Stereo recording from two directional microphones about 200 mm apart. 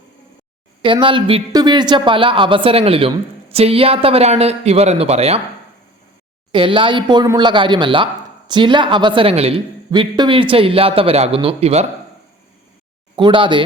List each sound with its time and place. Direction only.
0.8 s a woman's voice: 25° right (ahead or behind)
6.5 s a woman's voice: 25° right (ahead or behind)
13.1 s a woman's voice: 25° right (ahead or behind)